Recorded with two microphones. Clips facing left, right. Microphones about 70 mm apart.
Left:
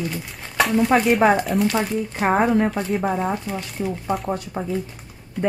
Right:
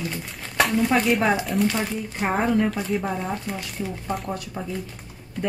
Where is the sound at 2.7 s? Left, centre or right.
Centre.